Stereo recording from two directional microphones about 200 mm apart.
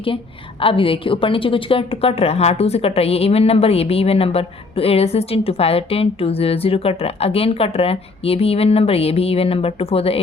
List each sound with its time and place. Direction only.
0.6 s a woman's voice: 25° left (ahead or behind)